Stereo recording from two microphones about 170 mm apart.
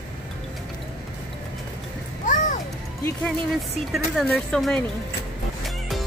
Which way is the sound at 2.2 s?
50° left (ahead or behind).